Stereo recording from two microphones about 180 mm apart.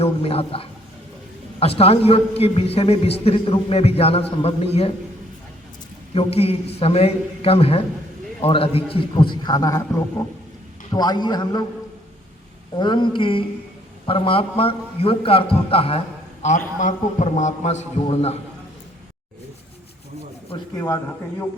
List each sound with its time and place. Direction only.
0.0 s a man's voice: 35° left (ahead or behind)
6.1 s a man's voice: 35° left (ahead or behind)
12.7 s a man's voice: 25° left (ahead or behind)
16.4 s a man's voice: 45° left (ahead or behind)
20.7 s a man's voice: 20° left (ahead or behind)